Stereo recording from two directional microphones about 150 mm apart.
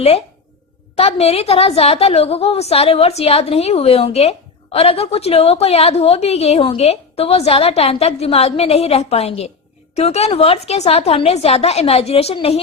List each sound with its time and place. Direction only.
0.9 s a woman's voice: 40° left (ahead or behind)